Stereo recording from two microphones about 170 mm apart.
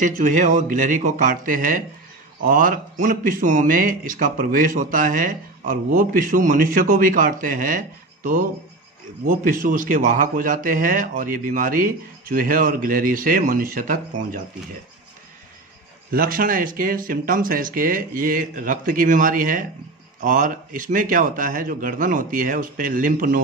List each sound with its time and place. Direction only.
0.0 s a man's voice: 50° right (ahead or behind)
16.1 s a man's voice: 60° right (ahead or behind)